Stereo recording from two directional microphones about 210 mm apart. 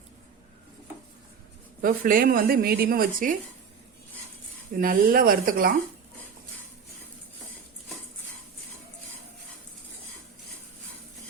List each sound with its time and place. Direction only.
1.8 s speech: 40° right (ahead or behind)
4.8 s speech: 45° right (ahead or behind)